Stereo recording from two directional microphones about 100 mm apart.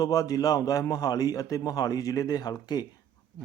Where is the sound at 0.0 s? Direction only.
40° left (ahead or behind).